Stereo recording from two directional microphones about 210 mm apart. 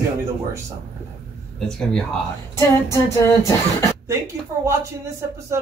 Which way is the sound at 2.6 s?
15° left (ahead or behind).